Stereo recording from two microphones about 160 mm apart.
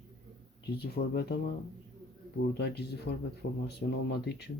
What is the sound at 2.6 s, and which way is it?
Speech, 90° left.